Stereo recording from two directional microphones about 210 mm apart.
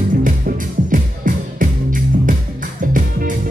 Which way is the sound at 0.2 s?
40° right (ahead or behind).